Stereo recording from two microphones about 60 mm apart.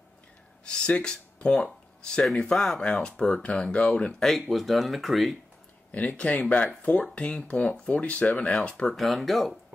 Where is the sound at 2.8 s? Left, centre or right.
Centre.